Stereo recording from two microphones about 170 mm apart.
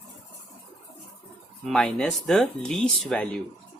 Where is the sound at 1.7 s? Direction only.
5° left (ahead or behind).